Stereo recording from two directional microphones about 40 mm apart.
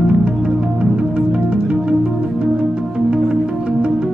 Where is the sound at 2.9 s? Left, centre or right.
Right.